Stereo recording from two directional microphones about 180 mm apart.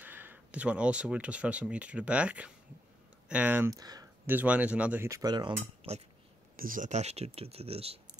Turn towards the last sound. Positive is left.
turn(degrees=-35)  # may be behind; listen again after turning